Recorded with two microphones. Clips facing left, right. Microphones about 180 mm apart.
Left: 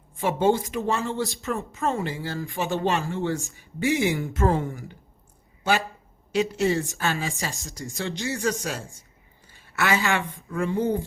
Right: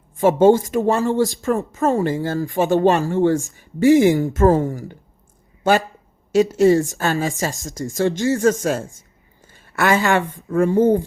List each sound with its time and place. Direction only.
0.2 s a woman's voice: 45° right (ahead or behind)
9.4 s a sound: 50° right (ahead or behind)
10.5 s speech: 45° right (ahead or behind)